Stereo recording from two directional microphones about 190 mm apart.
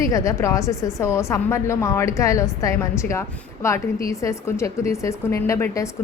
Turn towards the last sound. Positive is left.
turn(degrees=15)  # may be behind; listen again after turning